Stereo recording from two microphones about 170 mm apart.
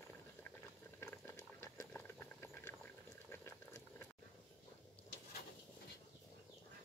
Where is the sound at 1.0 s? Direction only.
15° left (ahead or behind).